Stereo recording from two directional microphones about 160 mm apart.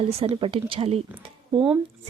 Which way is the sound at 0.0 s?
40° right (ahead or behind).